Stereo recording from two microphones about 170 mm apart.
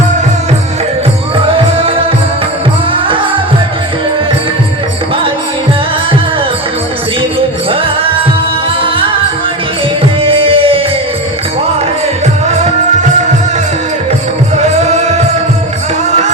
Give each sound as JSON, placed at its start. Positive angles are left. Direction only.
{"t": 2.9, "sound": "music", "side_deg": -30}
{"t": 8.8, "sound": "music", "side_deg": -30}
{"t": 10.2, "sound": "music", "side_deg": -30}
{"t": 14.5, "sound": "music", "side_deg": -40}